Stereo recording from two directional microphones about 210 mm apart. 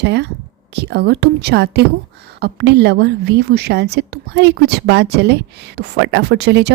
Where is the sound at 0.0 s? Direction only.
55° right (ahead or behind).